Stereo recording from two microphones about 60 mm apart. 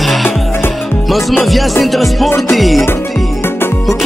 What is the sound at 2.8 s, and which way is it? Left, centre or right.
Music, left.